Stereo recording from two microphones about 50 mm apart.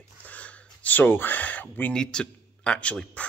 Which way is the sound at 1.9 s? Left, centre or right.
Centre.